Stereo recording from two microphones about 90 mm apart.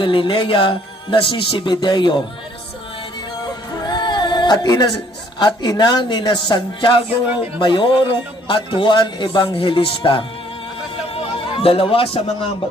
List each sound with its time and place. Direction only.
0.0 s speech: 70° left (ahead or behind)
3.4 s music: 50° left (ahead or behind)
5.4 s a man's voice: 55° left (ahead or behind)
11.1 s music: 90° left